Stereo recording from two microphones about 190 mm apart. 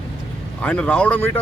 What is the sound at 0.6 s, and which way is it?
Speech, 5° left (ahead or behind).